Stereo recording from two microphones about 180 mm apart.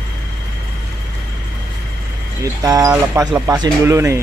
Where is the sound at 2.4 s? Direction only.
20° right (ahead or behind).